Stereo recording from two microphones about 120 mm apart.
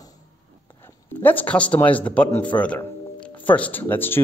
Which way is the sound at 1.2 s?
15° left (ahead or behind).